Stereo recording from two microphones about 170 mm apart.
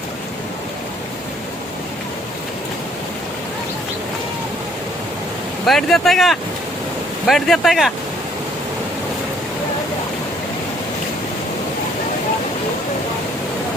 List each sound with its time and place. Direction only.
5.6 s speech: centre (ahead or behind)